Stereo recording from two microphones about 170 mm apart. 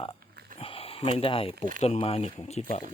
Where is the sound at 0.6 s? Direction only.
35° left (ahead or behind).